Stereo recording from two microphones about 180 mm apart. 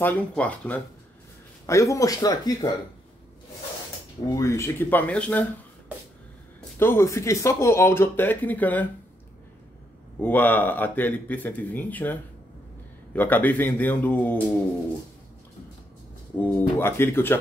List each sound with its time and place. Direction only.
0.0 s speech: 10° left (ahead or behind)
4.3 s speech: 15° left (ahead or behind)
6.8 s speech: 15° left (ahead or behind)
10.2 s speech: 10° left (ahead or behind)
16.3 s speech: 10° left (ahead or behind)